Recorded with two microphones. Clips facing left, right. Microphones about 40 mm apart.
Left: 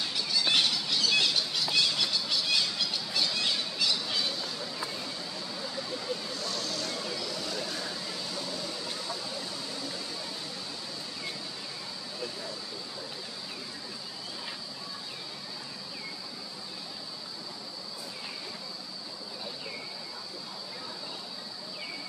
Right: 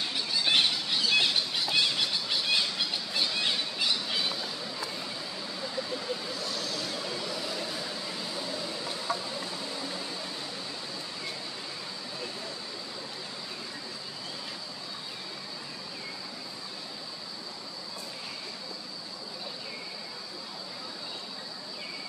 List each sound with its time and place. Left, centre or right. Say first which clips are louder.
0.0 s squawk: even; centre
5.6 s vehicle: right 3 dB; centre